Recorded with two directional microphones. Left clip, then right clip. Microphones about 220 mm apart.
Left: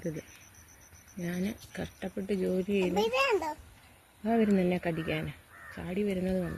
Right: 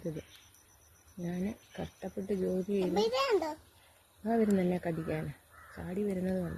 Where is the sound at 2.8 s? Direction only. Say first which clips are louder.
Left 2 dB; centre (ahead or behind).